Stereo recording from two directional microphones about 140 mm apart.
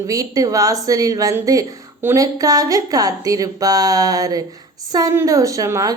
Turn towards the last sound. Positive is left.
turn(degrees=-25)  # may be behind; listen again after turning